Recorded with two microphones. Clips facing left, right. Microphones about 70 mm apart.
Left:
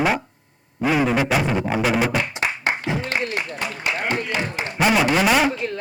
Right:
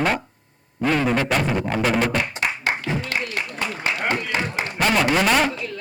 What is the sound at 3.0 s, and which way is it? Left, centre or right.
Music, left.